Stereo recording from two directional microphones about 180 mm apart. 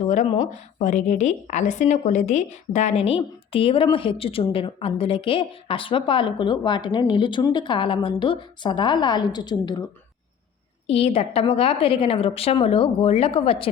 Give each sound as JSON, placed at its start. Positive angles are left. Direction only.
{"t": 0.8, "sound": "a woman's voice", "side_deg": 40}
{"t": 10.8, "sound": "a woman's voice", "side_deg": 35}